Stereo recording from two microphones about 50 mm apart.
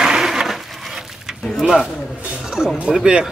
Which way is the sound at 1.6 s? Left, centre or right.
Centre.